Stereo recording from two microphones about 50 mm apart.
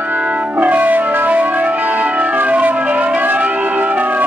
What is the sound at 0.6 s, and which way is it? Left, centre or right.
Music, right.